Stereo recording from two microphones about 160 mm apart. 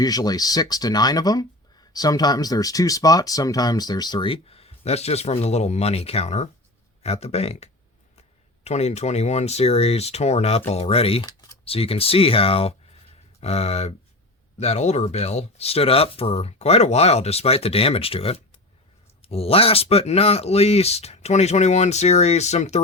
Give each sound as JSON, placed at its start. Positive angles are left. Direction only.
{"t": 0.0, "sound": "speech", "side_deg": 25}